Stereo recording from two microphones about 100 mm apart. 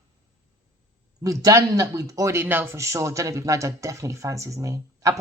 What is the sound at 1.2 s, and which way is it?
Speech, 35° right (ahead or behind).